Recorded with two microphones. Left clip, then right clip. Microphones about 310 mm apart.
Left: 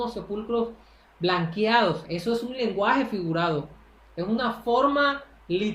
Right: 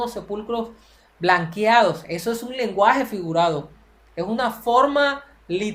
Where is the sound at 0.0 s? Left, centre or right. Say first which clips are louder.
Right 3 dB; right.